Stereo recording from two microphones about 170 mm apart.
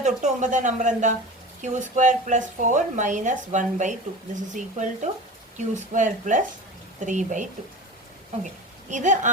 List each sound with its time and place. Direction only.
0.0 s a woman's voice: 45° right (ahead or behind)
8.9 s a woman's voice: 45° right (ahead or behind)